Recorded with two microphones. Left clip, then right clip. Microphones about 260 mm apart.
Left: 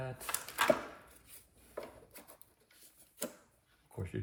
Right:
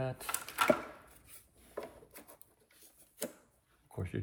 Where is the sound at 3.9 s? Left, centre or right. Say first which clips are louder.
Right 1 dB; right.